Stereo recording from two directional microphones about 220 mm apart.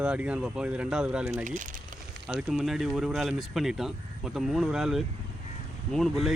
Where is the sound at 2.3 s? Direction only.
5° right (ahead or behind).